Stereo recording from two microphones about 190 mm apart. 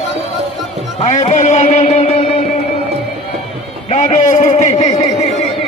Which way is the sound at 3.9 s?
35° left (ahead or behind).